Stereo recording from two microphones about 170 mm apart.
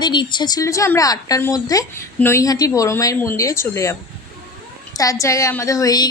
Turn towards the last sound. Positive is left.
turn(degrees=20)  # may be behind; listen again after turning